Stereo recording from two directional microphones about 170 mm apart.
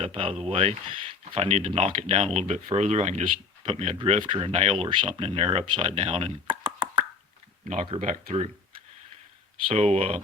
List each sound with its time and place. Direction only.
0.0 s speech: 35° right (ahead or behind)
3.7 s speech: 30° right (ahead or behind)
7.9 s speech: 40° right (ahead or behind)
9.6 s speech: 35° right (ahead or behind)